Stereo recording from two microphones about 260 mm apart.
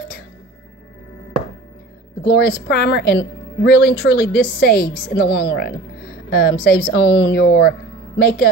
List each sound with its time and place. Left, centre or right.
2.2 s a woman's voice: left